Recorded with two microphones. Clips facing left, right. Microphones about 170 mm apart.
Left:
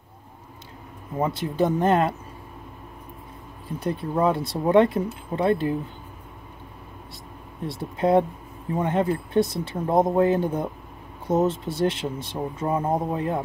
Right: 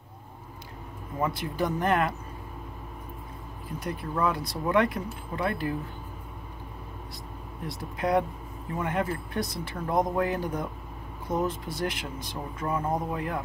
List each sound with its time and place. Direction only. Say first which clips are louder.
1.1 s speech: left 5 dB; 25° left (ahead or behind)
3.8 s speech: left 6 dB; 25° left (ahead or behind)
7.6 s speech: left 7 dB; 25° left (ahead or behind)